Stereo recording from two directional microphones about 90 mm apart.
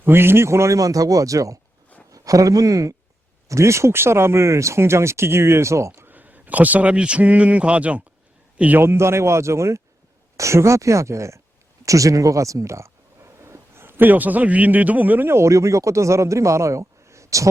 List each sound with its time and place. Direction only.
0.0 s speech: 25° right (ahead or behind)
6.1 s a man's voice: 20° right (ahead or behind)
8.8 s speech: 30° right (ahead or behind)